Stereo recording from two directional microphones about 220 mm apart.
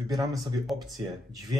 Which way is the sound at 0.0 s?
15° right (ahead or behind).